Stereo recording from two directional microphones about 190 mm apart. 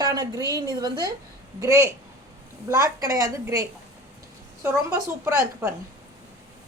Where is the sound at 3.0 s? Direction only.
20° right (ahead or behind).